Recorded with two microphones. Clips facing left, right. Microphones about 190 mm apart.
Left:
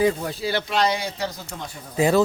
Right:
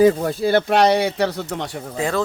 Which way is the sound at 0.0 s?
50° right (ahead or behind).